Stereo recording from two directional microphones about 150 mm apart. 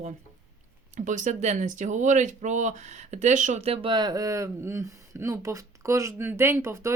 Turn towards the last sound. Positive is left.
turn(degrees=-20)  # may be behind; listen again after turning